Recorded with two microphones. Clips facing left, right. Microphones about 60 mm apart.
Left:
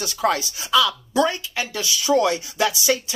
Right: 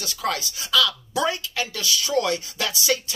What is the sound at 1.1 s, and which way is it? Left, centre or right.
Speech, centre.